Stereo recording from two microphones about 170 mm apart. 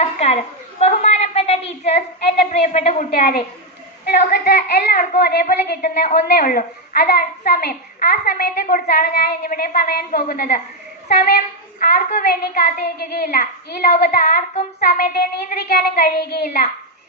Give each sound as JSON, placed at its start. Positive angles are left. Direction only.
{"t": 0.0, "sound": "a woman's voice", "side_deg": 40}
{"t": 0.8, "sound": "a sound", "side_deg": 40}
{"t": 2.5, "sound": "a woman's voice", "side_deg": 45}
{"t": 3.2, "sound": "a woman's voice", "side_deg": 60}
{"t": 4.0, "sound": "a woman's voice", "side_deg": 70}